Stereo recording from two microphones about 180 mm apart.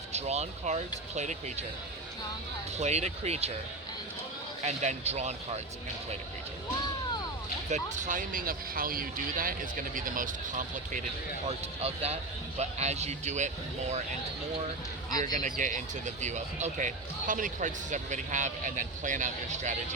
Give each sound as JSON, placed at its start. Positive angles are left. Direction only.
{"t": 0.1, "sound": "a man's voice", "side_deg": -35}
{"t": 2.7, "sound": "a man's voice", "side_deg": -40}
{"t": 4.6, "sound": "a man's voice", "side_deg": -40}
{"t": 7.7, "sound": "speech", "side_deg": -45}
{"t": 11.4, "sound": "a man's voice", "side_deg": -35}
{"t": 15.2, "sound": "speech", "side_deg": -45}